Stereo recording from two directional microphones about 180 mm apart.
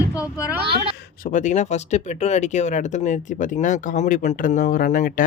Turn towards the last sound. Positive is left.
turn(degrees=45)  # may be behind; listen again after turning